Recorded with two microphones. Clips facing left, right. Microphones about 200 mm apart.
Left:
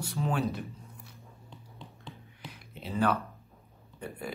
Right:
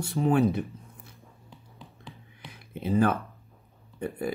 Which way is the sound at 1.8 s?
Centre (ahead or behind).